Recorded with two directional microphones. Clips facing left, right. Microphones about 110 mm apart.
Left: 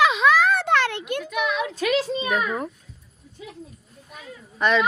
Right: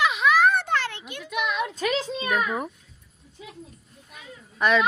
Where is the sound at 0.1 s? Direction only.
90° left; by 1.2 s 60° left (ahead or behind).